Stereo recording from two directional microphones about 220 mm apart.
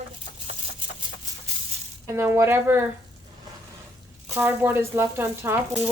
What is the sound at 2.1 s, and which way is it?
Speech, 10° right (ahead or behind).